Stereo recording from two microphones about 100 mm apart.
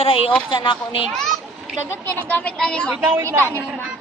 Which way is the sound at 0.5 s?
50° left (ahead or behind).